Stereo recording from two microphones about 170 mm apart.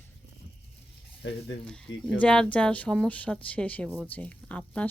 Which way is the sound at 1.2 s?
90° left.